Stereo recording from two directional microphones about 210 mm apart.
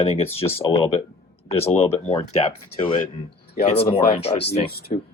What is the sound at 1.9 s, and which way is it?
Speech, 30° left (ahead or behind).